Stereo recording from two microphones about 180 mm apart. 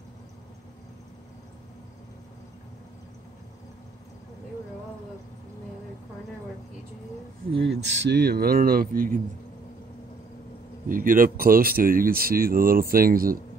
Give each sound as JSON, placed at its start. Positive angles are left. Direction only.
{"t": 7.5, "sound": "speech", "side_deg": -70}
{"t": 10.9, "sound": "speech", "side_deg": -50}